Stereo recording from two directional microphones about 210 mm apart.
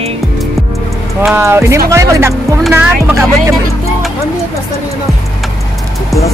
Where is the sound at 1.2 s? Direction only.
10° right (ahead or behind).